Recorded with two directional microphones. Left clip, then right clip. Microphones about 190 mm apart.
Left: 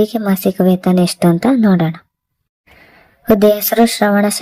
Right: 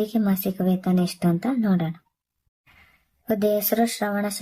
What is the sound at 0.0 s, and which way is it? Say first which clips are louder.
Speech: left 10 dB; 40° left (ahead or behind).